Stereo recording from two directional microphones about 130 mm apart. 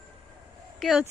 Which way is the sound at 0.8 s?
Centre (ahead or behind).